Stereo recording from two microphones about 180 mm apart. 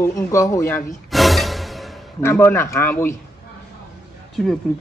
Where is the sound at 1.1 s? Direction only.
Centre (ahead or behind).